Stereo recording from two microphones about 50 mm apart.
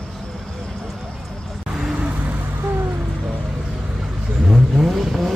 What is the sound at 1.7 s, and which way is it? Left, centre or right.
Vehicle, centre.